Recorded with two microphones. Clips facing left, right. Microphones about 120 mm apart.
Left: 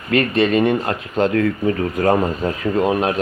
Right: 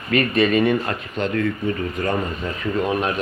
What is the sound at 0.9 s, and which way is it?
Speech, 50° left (ahead or behind).